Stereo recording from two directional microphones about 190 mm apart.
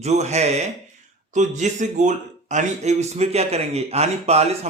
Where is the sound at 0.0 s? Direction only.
35° right (ahead or behind).